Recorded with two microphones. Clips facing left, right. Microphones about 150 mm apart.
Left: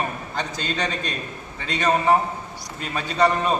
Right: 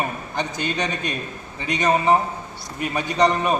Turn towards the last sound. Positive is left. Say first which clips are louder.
# right 1 dB
turn(degrees=-15)  # may be behind; listen again after turning